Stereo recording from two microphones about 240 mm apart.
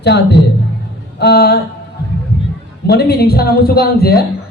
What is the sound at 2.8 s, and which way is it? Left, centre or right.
Speech, left.